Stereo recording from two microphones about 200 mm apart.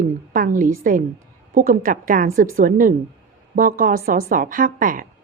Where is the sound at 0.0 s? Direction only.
40° right (ahead or behind).